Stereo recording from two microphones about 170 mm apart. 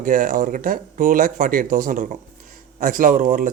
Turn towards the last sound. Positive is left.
turn(degrees=-50)  # may be behind; listen again after turning